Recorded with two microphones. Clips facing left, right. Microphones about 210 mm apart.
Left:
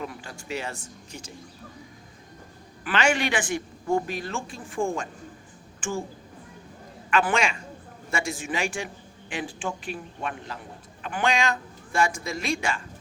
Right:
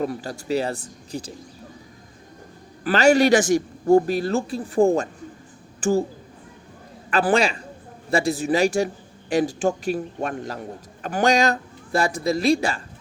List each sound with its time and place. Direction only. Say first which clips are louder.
0.0 s a man's voice: right 10 dB; 40° right (ahead or behind)
2.8 s a man's voice: right 8 dB; 40° right (ahead or behind)
7.1 s a man's voice: right 5 dB; 35° right (ahead or behind)